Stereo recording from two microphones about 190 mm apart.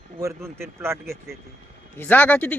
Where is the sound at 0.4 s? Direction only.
15° right (ahead or behind).